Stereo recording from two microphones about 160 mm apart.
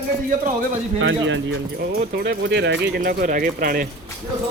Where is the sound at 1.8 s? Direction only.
70° right (ahead or behind).